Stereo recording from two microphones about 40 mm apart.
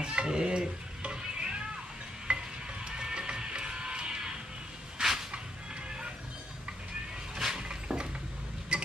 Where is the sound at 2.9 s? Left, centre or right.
Centre.